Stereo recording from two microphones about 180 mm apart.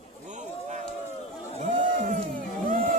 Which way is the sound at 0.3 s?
40° right (ahead or behind).